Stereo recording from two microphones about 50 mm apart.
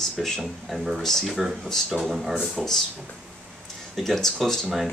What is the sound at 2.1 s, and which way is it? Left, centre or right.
Speech, centre.